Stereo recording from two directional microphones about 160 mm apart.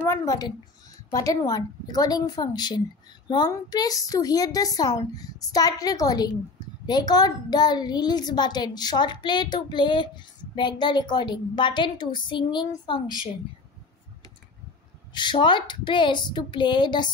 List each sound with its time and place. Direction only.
0.0 s a woman's voice: 15° left (ahead or behind)
15.1 s a woman's voice: 30° left (ahead or behind)